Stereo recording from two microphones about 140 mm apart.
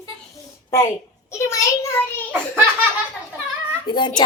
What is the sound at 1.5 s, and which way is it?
Speech, 20° left (ahead or behind).